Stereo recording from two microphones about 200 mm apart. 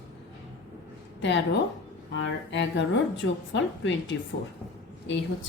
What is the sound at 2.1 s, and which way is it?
A woman's voice, 65° left (ahead or behind).